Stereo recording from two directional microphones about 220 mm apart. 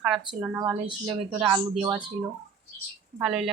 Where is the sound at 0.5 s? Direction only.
10° right (ahead or behind).